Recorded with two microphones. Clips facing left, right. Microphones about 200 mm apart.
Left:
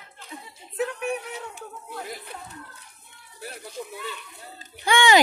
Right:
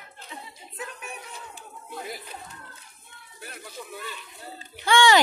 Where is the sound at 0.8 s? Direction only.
70° left (ahead or behind).